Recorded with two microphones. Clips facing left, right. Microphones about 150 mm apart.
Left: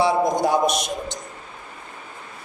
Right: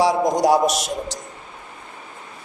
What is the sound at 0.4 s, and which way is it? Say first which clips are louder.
Speech: right 3 dB; 90° right.